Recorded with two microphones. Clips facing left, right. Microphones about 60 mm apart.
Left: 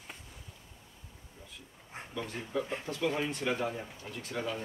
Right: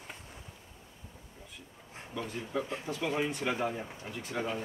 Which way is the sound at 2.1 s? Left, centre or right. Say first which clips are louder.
Even; centre.